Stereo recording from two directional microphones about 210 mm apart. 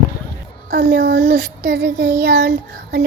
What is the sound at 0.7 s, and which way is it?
Child singing, 50° right (ahead or behind).